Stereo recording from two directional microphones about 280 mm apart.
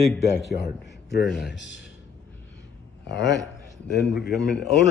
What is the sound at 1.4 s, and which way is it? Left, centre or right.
Speech, left.